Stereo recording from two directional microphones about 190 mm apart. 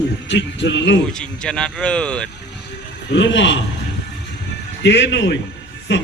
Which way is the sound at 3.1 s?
75° left (ahead or behind).